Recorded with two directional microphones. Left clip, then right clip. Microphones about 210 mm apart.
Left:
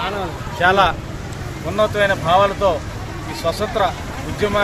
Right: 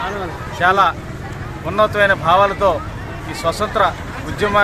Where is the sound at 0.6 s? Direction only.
5° left (ahead or behind).